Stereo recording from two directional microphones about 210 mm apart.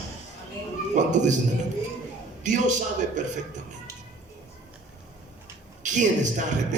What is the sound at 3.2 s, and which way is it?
Speech, 35° right (ahead or behind).